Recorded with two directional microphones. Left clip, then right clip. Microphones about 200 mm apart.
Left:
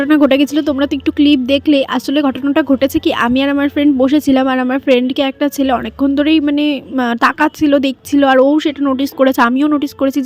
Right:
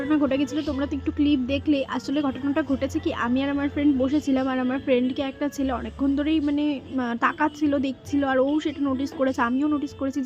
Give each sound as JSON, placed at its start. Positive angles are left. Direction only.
{"t": 0.1, "sound": "speech", "side_deg": 45}